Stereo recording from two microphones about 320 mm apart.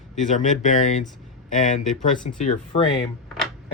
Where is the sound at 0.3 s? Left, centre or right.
Left.